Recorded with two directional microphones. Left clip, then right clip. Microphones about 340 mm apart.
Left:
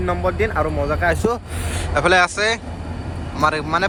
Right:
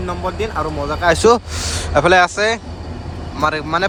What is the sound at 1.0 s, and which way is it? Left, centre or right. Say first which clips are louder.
Speech: right 9 dB; right.